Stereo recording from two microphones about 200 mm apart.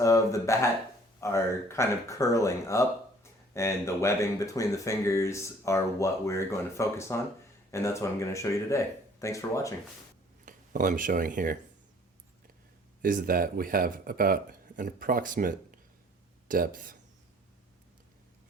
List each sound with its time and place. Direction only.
0.0 s speech: 15° left (ahead or behind)
10.4 s speech: 40° right (ahead or behind)
13.0 s speech: 45° right (ahead or behind)